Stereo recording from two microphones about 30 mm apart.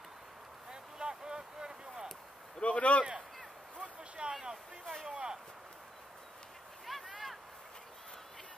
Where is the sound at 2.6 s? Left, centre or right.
Left.